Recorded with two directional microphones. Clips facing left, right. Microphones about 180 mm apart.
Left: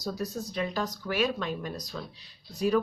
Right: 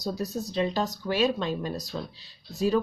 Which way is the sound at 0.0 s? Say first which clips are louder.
Right 2 dB; 25° right (ahead or behind).